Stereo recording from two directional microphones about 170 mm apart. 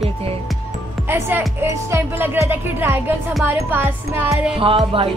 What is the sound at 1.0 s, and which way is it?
Speech, 15° right (ahead or behind).